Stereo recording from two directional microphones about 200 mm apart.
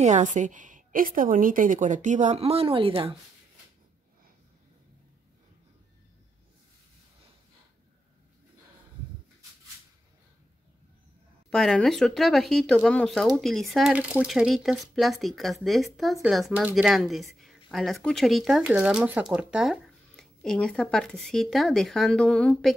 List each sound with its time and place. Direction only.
0.0 s a woman's voice: 40° right (ahead or behind)
11.5 s speech: centre (ahead or behind)